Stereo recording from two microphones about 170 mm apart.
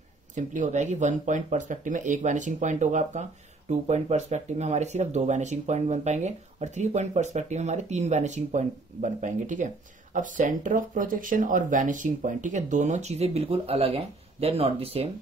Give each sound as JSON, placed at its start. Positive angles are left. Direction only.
{"t": 0.3, "sound": "speech", "side_deg": -45}